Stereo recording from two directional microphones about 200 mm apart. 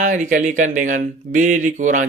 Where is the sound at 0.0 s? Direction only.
40° right (ahead or behind).